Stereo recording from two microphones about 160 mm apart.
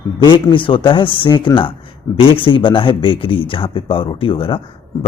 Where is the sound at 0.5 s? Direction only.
30° left (ahead or behind).